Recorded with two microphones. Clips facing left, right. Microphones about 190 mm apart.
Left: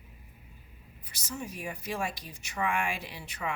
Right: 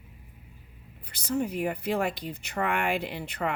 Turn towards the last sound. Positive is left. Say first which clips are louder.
# right 7 dB
turn(degrees=-60)  # may be behind; listen again after turning